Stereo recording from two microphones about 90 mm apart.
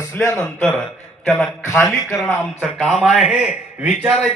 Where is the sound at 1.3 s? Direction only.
20° left (ahead or behind).